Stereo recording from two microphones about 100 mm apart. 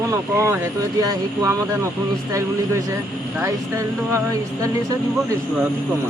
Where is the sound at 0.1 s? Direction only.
30° right (ahead or behind).